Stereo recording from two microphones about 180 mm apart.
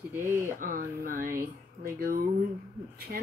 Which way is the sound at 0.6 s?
50° right (ahead or behind).